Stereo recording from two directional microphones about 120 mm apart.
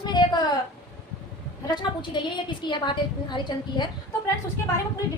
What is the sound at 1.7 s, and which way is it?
A woman's voice, 40° left (ahead or behind).